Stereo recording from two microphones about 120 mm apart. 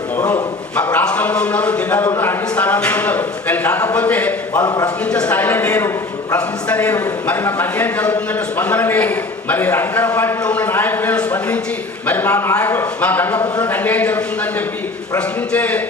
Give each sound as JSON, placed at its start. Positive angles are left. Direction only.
{"t": 0.9, "sound": "a man's voice", "side_deg": 10}
{"t": 4.6, "sound": "speech", "side_deg": 35}
{"t": 5.0, "sound": "speech", "side_deg": 10}
{"t": 15.5, "sound": "speech", "side_deg": 10}